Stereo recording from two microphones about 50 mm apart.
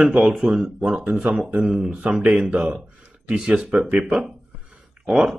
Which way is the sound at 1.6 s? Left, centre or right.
Centre.